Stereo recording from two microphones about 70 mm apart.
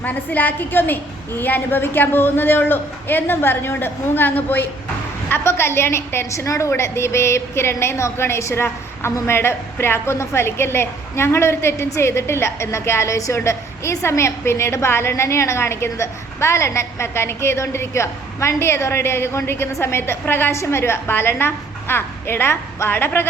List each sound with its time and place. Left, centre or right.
0.0 s a woman's voice: left